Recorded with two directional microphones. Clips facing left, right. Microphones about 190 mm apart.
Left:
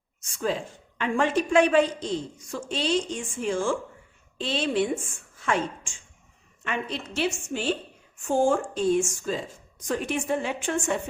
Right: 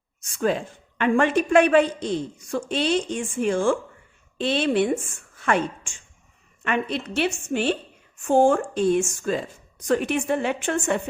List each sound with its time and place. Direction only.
0.9 s a woman's voice: 60° right (ahead or behind)